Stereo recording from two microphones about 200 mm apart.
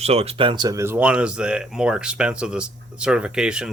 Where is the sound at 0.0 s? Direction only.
30° right (ahead or behind).